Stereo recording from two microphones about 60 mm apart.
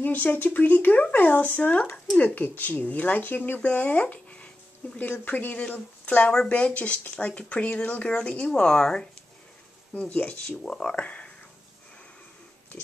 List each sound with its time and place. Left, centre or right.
0.0 s speech: left; by 9.0 s centre
10.1 s speech: centre